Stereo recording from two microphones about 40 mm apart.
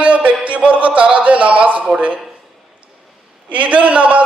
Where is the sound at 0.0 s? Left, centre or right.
Right.